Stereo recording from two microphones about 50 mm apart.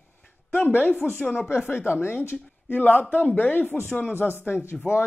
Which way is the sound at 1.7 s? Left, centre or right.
Left.